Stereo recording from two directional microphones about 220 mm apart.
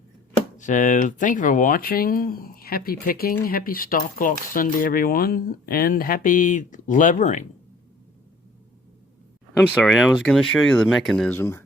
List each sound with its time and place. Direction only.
0.5 s speech: 35° left (ahead or behind)
9.7 s speech: centre (ahead or behind)